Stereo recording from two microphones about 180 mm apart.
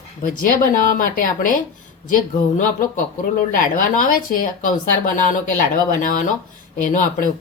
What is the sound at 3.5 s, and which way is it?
Speech, 50° left (ahead or behind).